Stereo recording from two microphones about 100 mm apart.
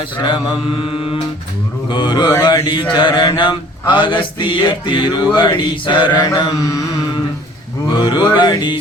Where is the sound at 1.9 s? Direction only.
50° left (ahead or behind).